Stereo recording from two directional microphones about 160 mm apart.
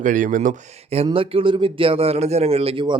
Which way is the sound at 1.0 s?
35° right (ahead or behind).